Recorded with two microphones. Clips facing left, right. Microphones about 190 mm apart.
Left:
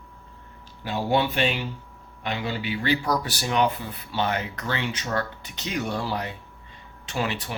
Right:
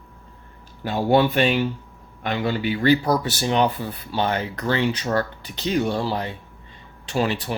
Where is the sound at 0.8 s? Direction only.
50° right (ahead or behind).